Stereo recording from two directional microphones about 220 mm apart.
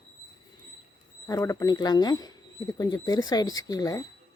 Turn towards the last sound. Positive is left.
turn(degrees=15)  # may be behind; listen again after turning